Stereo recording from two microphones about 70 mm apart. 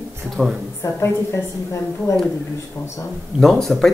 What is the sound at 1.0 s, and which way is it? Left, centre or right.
A woman's voice, left.